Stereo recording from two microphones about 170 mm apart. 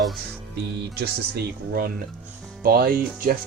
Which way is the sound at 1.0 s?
65° right (ahead or behind).